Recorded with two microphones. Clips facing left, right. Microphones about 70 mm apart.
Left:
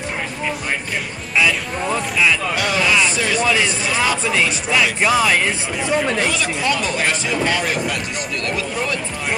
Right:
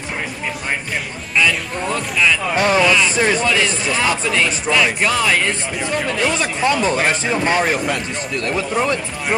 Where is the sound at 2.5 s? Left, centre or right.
Right.